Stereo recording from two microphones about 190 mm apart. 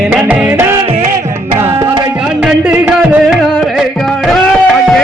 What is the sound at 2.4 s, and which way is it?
Music, 5° right (ahead or behind).